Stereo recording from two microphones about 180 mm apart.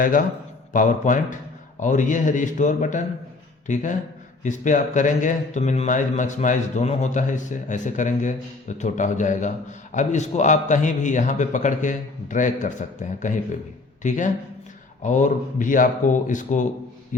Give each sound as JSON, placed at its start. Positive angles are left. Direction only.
{"t": 0.7, "sound": "speech", "side_deg": 45}